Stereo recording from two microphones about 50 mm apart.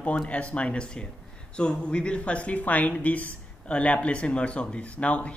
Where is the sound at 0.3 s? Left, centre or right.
Left.